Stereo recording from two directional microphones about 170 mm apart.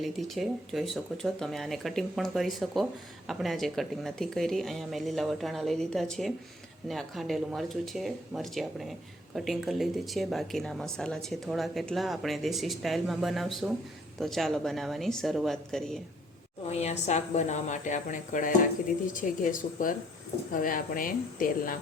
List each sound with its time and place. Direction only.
0.0 s speech: centre (ahead or behind)
16.6 s speech: 40° left (ahead or behind); by 21.8 s 55° left (ahead or behind)